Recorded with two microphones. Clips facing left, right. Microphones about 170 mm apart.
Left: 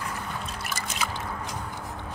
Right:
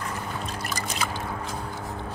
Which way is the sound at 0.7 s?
5° left (ahead or behind).